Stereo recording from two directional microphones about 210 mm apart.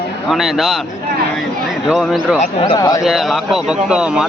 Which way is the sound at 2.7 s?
15° left (ahead or behind).